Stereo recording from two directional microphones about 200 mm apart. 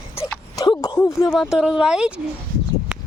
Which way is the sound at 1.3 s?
Centre (ahead or behind).